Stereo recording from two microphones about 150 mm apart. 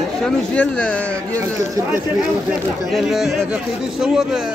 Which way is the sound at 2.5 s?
Centre (ahead or behind).